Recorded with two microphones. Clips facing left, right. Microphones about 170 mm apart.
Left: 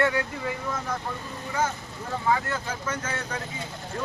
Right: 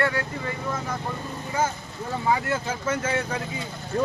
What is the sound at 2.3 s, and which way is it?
Speech, 15° right (ahead or behind).